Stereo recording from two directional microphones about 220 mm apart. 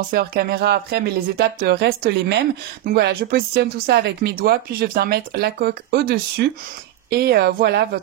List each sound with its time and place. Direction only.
0.1 s speech: 45° right (ahead or behind)